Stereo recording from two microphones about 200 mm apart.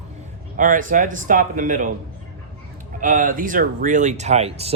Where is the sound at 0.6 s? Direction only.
40° right (ahead or behind).